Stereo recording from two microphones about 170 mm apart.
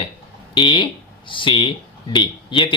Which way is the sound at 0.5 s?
30° left (ahead or behind).